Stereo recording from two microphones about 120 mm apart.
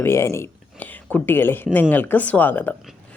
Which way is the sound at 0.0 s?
20° left (ahead or behind).